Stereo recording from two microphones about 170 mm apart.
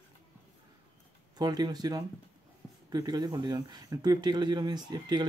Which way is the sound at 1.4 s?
25° right (ahead or behind).